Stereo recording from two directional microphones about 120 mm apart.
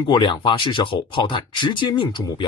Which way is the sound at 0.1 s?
40° left (ahead or behind).